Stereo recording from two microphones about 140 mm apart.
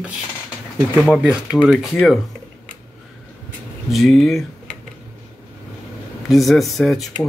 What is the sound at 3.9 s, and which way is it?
Speech, centre (ahead or behind).